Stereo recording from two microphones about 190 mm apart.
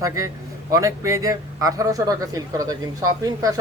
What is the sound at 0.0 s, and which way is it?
Speech, 15° right (ahead or behind).